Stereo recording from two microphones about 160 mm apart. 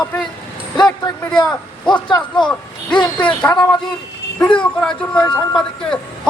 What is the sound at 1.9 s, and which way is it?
Speech, 30° left (ahead or behind).